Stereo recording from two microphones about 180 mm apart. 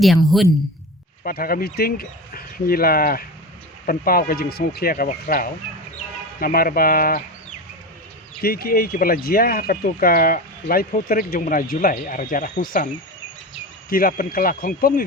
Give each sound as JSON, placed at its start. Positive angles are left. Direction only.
{"t": 0.0, "sound": "speech", "side_deg": 0}
{"t": 1.2, "sound": "speech", "side_deg": 55}
{"t": 8.4, "sound": "speech", "side_deg": 55}
{"t": 13.9, "sound": "speech", "side_deg": 55}